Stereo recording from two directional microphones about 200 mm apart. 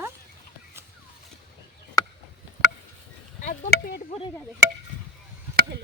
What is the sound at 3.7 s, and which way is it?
Speech, 50° left (ahead or behind).